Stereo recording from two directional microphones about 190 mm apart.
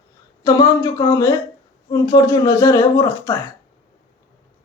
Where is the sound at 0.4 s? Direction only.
20° left (ahead or behind).